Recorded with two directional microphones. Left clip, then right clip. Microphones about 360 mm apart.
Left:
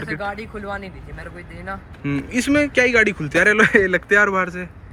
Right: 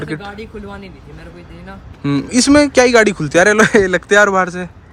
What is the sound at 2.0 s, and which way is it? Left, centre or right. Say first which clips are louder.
Speech: right 8 dB; centre.